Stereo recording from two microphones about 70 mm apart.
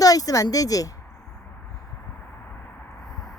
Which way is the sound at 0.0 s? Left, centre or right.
Left.